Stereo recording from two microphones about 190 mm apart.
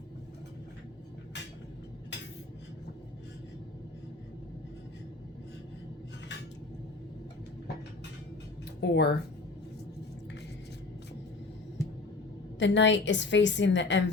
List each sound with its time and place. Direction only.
8.8 s speech: 60° left (ahead or behind)
11.8 s a sound: 15° left (ahead or behind)
12.5 s a woman's voice: 70° left (ahead or behind)